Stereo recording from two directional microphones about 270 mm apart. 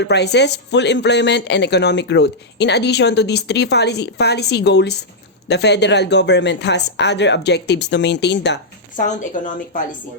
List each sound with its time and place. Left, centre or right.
0.0 s speech: left
9.0 s a woman's voice: left